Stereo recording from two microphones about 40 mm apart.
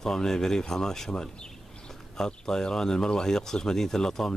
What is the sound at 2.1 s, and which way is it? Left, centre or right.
Speech, centre.